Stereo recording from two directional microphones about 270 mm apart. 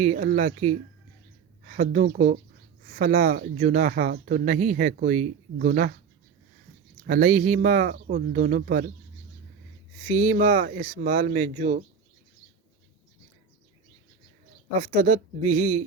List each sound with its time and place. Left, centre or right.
0.0 s speech: right
7.1 s speech: right
10.1 s speech: right
14.8 s speech: right